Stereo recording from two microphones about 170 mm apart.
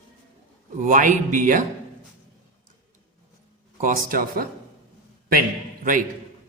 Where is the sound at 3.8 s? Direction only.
50° right (ahead or behind).